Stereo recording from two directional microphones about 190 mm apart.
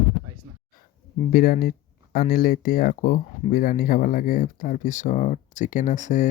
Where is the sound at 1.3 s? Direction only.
50° left (ahead or behind).